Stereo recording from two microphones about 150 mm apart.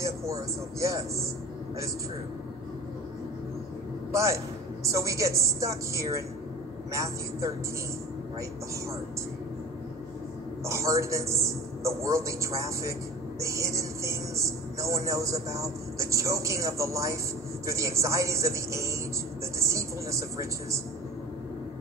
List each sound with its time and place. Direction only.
0.0 s speech: 20° right (ahead or behind)
4.1 s a man's voice: 20° right (ahead or behind)
10.6 s a man's voice: 20° right (ahead or behind)